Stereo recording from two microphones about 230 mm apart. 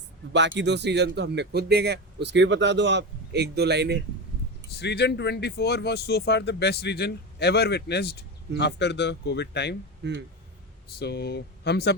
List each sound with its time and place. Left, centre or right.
0.3 s speech: right
4.8 s speech: left
10.0 s speech: right
11.0 s speech: left